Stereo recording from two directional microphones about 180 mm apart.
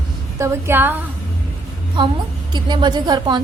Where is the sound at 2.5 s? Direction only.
25° right (ahead or behind).